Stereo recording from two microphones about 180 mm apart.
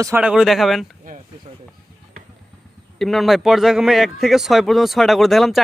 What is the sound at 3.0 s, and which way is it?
Speech, centre (ahead or behind).